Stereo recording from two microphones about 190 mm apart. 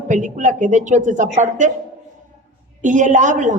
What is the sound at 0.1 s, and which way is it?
A woman's voice, 40° right (ahead or behind).